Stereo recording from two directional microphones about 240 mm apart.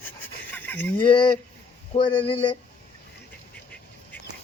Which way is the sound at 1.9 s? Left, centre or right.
Left.